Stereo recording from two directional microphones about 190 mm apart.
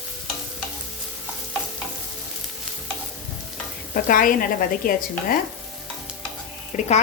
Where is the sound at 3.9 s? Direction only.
45° left (ahead or behind).